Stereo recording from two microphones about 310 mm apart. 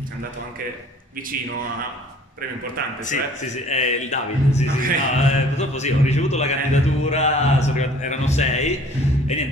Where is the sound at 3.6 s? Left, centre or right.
Left.